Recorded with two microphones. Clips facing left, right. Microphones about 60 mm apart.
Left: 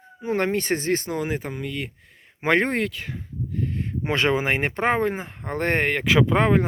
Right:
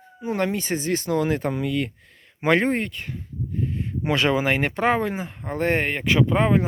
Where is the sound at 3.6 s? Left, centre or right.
Left.